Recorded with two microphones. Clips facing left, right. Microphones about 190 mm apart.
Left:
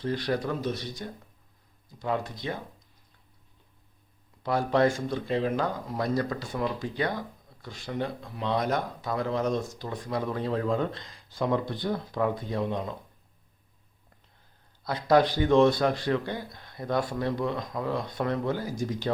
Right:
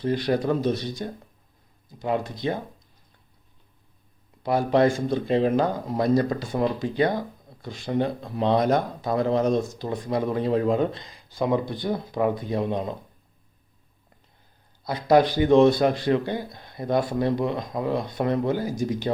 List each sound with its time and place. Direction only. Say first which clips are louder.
0.0 s speech: right 5 dB; 20° right (ahead or behind)
4.4 s speech: right 4 dB; 15° right (ahead or behind)
14.8 s speech: right 3 dB; 10° right (ahead or behind)